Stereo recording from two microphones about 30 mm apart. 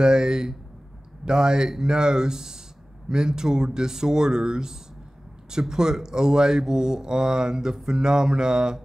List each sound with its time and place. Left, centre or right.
0.0 s speech: right